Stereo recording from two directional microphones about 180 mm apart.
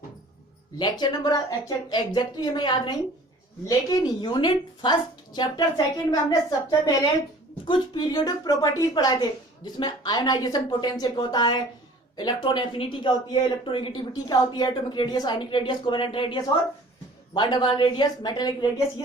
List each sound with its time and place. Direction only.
0.8 s speech: 20° left (ahead or behind)